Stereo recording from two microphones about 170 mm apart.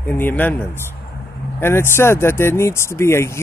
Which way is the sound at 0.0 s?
10° left (ahead or behind).